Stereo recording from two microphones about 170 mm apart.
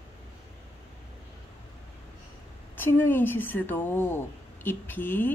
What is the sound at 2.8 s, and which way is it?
A woman's voice, 10° left (ahead or behind).